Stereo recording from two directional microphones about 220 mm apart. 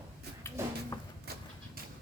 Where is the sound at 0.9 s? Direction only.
15° left (ahead or behind).